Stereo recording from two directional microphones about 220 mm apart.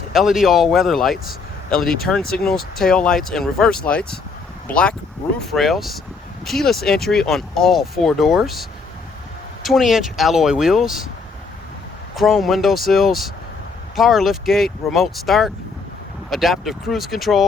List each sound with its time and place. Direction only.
0.1 s speech: centre (ahead or behind)
9.6 s speech: centre (ahead or behind)
12.1 s speech: centre (ahead or behind)